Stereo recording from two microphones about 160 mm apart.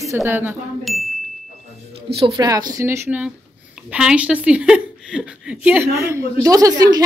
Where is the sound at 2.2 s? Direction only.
25° right (ahead or behind).